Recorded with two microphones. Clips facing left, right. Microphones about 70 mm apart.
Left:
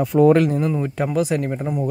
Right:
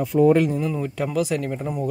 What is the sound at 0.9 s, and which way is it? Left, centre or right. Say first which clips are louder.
Speech: left 3 dB; left.